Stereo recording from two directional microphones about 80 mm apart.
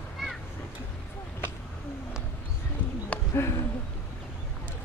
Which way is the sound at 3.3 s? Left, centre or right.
Left.